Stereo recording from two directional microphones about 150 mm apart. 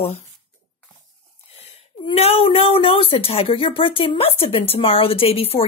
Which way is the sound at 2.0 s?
40° left (ahead or behind).